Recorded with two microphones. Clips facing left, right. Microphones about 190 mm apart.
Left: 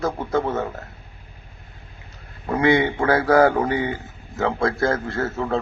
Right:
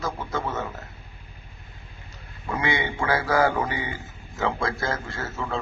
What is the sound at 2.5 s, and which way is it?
Speech, 55° left (ahead or behind).